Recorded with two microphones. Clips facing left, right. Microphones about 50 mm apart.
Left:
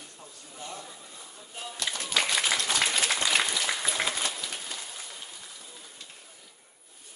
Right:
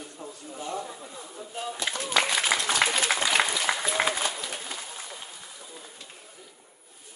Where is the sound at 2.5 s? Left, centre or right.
Centre.